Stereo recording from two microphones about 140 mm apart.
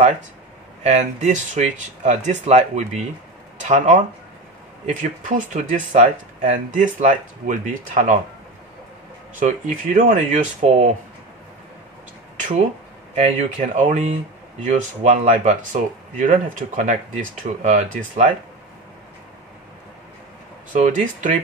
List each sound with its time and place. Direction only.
0.8 s speech: 55° right (ahead or behind)
9.4 s speech: 65° right (ahead or behind)
12.4 s a sound: 65° right (ahead or behind)
13.1 s speech: 55° right (ahead or behind)
20.7 s speech: 65° right (ahead or behind)